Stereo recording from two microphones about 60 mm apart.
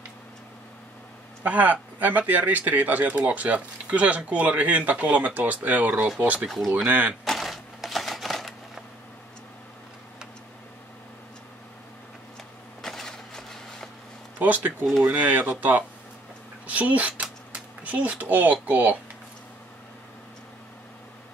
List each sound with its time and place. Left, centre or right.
1.4 s speech: right
7.2 s typewriter: centre
12.8 s a sound: centre
14.4 s speech: right
16.6 s speech: right